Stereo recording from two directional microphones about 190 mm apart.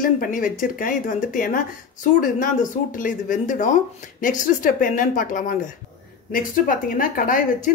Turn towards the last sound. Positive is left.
turn(degrees=45)  # may be behind; listen again after turning